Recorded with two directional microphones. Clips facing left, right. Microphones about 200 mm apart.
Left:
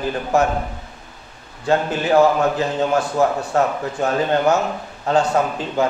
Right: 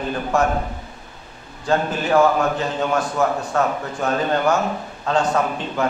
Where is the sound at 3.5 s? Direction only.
25° left (ahead or behind).